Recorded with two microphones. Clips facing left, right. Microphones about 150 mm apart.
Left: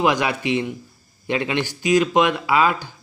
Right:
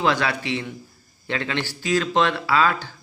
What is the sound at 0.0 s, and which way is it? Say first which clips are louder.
A man's voice: left 2 dB; 15° left (ahead or behind).